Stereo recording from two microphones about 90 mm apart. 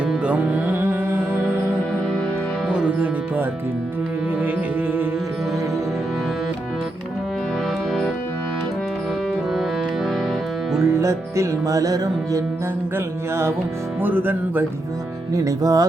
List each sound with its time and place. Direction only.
0.3 s music: 20° right (ahead or behind)
2.6 s music: 15° right (ahead or behind)
10.8 s music: 35° right (ahead or behind)
14.0 s music: 20° right (ahead or behind)
15.4 s music: 40° right (ahead or behind)